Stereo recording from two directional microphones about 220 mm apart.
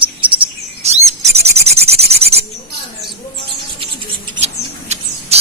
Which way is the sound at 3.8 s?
25° right (ahead or behind).